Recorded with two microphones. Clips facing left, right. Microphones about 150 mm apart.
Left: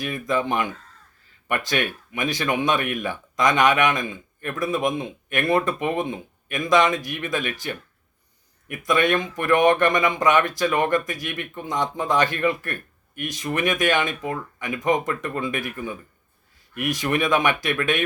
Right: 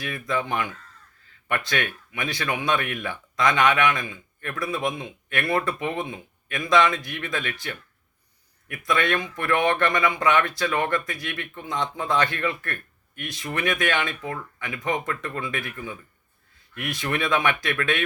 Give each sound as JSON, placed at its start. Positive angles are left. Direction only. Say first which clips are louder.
{"t": 0.0, "sound": "speech", "louder": "left 4 dB", "side_deg": 20}
{"t": 8.9, "sound": "speech", "louder": "left 4 dB", "side_deg": 15}
{"t": 13.2, "sound": "speech", "louder": "left 5 dB", "side_deg": 40}
{"t": 13.5, "sound": "speech", "louder": "left 3 dB", "side_deg": 15}
{"t": 16.7, "sound": "speech", "louder": "left 5 dB", "side_deg": 15}